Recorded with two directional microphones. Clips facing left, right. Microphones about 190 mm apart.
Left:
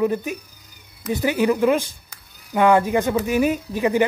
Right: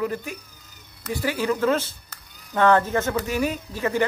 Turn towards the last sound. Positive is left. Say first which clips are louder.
# left 5 dB
turn(degrees=15)  # may be behind; listen again after turning